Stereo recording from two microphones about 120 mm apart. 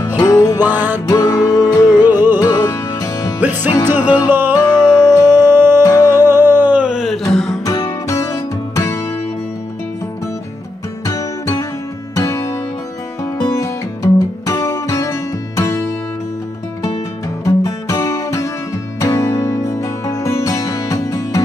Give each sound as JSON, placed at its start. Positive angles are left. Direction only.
{"t": 0.2, "sound": "music", "side_deg": 30}
{"t": 0.7, "sound": "music", "side_deg": -15}
{"t": 1.0, "sound": "music", "side_deg": 30}
{"t": 2.0, "sound": "music", "side_deg": -15}
{"t": 2.4, "sound": "music", "side_deg": 35}
{"t": 3.3, "sound": "music", "side_deg": -15}
{"t": 4.6, "sound": "music", "side_deg": 30}
{"t": 5.4, "sound": "music", "side_deg": -20}
{"t": 5.9, "sound": "music", "side_deg": 35}
{"t": 6.2, "sound": "a sound", "side_deg": -20}
{"t": 7.6, "sound": "music", "side_deg": 25}
{"t": 11.1, "sound": "music", "side_deg": 30}
{"t": 17.6, "sound": "music", "side_deg": 30}